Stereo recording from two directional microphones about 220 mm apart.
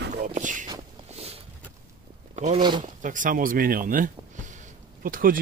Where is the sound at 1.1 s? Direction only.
25° right (ahead or behind).